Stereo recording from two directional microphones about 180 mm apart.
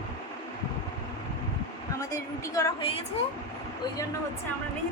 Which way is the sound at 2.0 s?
20° left (ahead or behind).